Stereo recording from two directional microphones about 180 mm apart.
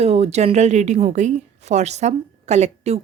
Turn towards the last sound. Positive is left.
turn(degrees=-35)  # may be behind; listen again after turning